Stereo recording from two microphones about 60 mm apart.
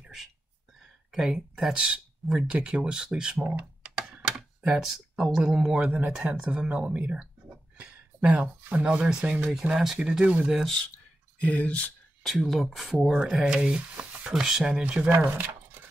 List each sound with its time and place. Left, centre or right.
1.1 s speech: centre
3.8 s computer keyboard: centre
5.9 s speech: right
7.4 s a sound: right
8.8 s speech: centre
11.4 s speech: left
12.2 s speech: centre
15.1 s speech: right